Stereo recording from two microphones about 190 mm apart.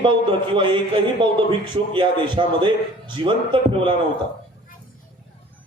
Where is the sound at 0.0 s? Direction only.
25° right (ahead or behind).